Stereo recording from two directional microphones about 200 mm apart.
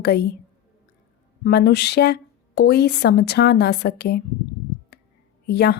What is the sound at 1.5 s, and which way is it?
Speech, 55° left (ahead or behind).